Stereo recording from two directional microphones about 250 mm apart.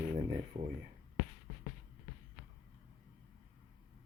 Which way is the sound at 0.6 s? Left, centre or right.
Right.